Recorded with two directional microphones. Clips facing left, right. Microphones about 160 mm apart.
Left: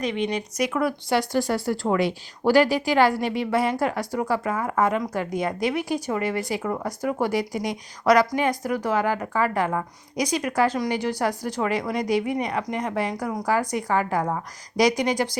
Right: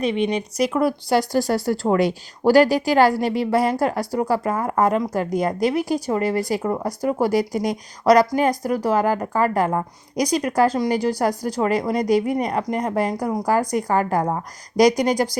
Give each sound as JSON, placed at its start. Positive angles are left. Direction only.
{"t": 0.0, "sound": "speech", "side_deg": -20}
{"t": 0.5, "sound": "a woman's voice", "side_deg": -35}